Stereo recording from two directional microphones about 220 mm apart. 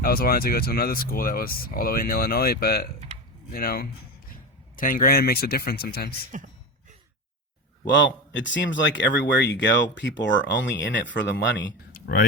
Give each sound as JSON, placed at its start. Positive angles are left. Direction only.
{"t": 0.0, "sound": "speech", "side_deg": 40}
{"t": 7.9, "sound": "speech", "side_deg": 55}